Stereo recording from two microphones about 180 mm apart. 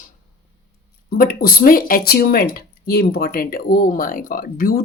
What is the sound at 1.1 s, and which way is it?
Speech, 55° left (ahead or behind).